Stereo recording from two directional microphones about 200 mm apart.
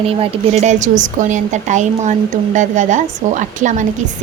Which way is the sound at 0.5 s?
35° right (ahead or behind).